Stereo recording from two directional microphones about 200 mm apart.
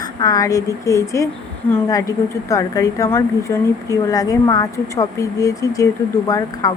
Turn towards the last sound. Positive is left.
turn(degrees=15)  # may be behind; listen again after turning